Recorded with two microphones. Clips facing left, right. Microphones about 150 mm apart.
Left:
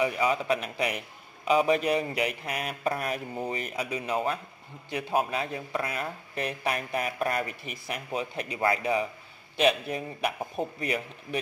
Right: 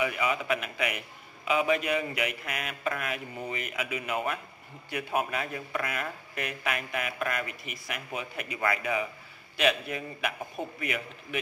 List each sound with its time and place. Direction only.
0.0 s a man's voice: 35° left (ahead or behind)